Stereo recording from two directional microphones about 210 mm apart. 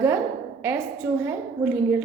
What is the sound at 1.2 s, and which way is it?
Speech, 10° right (ahead or behind).